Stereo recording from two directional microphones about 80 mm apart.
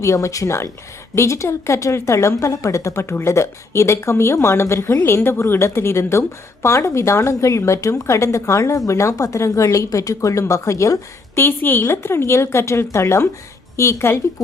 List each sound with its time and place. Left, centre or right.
0.0 s a woman's voice: left
11.3 s a woman's voice: left